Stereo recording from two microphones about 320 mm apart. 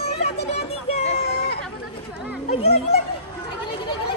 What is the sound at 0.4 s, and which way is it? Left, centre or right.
Music, centre.